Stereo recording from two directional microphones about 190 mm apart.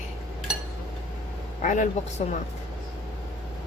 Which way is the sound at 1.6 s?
40° left (ahead or behind).